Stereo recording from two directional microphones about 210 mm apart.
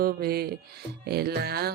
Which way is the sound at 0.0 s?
45° right (ahead or behind).